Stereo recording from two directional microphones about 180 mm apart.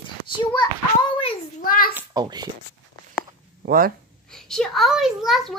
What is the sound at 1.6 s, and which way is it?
Speech, 50° left (ahead or behind).